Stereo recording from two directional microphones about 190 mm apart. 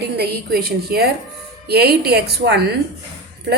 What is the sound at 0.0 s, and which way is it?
A woman's voice, 55° right (ahead or behind).